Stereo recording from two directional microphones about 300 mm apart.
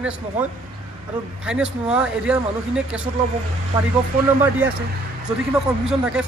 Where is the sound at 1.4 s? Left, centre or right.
Centre.